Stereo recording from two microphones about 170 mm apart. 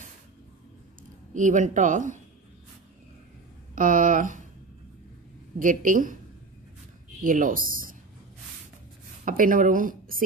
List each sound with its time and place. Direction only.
1.3 s speech: 50° right (ahead or behind)
3.7 s a sound: 50° right (ahead or behind)
5.6 s speech: 50° right (ahead or behind)
7.2 s speech: 50° right (ahead or behind)
9.2 s speech: 55° right (ahead or behind)